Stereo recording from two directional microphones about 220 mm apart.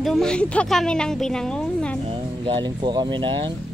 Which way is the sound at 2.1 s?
20° right (ahead or behind).